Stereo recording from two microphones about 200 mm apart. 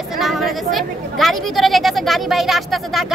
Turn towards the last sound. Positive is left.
turn(degrees=0)  # may be behind; listen again after turning